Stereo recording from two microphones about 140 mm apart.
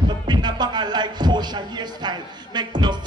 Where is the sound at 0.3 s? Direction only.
30° right (ahead or behind).